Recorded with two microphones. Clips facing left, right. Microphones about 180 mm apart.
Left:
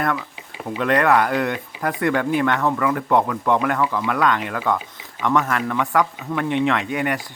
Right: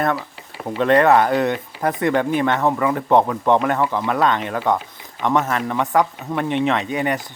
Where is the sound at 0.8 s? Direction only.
25° right (ahead or behind).